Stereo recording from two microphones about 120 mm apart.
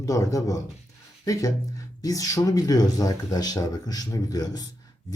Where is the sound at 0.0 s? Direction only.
30° left (ahead or behind).